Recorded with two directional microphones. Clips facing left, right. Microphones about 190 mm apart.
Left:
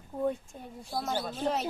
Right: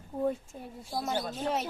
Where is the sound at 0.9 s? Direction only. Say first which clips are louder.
Even; 5° right (ahead or behind).